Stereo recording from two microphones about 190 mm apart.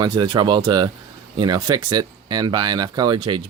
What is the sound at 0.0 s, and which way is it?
Speech, 25° right (ahead or behind).